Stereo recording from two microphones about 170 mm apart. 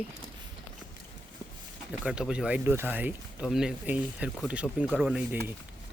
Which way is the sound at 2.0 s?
5° right (ahead or behind).